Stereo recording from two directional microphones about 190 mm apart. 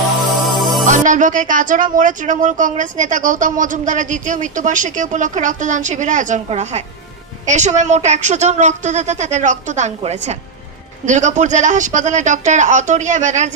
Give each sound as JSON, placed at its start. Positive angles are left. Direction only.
{"t": 0.2, "sound": "music", "side_deg": 0}
{"t": 0.8, "sound": "speech", "side_deg": -40}